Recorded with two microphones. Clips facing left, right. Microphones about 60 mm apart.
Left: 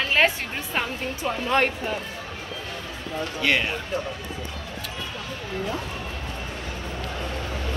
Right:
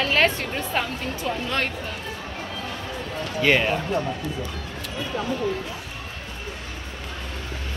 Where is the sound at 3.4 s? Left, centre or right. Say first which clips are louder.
Right 4 dB; centre.